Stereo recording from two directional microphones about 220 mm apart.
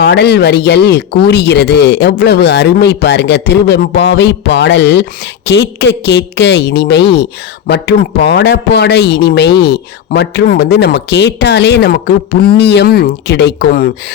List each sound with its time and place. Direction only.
0.0 s speech: 50° left (ahead or behind)